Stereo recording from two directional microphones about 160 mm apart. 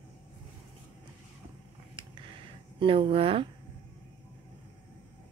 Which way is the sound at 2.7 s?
35° right (ahead or behind).